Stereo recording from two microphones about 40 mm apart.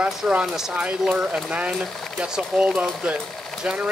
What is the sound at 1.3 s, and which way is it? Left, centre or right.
Speech, right.